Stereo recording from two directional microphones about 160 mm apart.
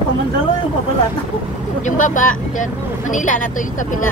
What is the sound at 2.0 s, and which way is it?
Speech, 55° left (ahead or behind).